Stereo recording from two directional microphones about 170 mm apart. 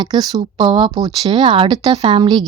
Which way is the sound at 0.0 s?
25° right (ahead or behind).